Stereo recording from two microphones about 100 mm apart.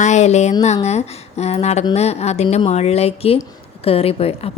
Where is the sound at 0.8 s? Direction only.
90° left.